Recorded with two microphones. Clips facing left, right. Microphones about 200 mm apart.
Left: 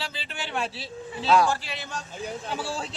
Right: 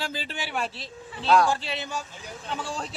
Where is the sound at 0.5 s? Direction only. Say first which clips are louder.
Left 3 dB; centre (ahead or behind).